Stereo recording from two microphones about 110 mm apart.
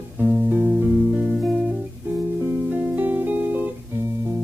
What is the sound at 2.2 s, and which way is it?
Music, 20° right (ahead or behind).